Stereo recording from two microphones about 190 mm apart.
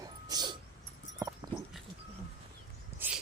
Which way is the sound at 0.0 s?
20° right (ahead or behind).